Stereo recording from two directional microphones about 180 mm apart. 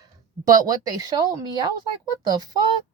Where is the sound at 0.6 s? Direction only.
20° right (ahead or behind).